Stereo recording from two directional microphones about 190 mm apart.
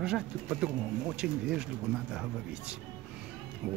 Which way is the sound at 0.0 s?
5° right (ahead or behind).